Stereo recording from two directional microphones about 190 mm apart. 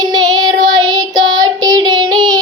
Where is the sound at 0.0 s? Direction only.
20° right (ahead or behind).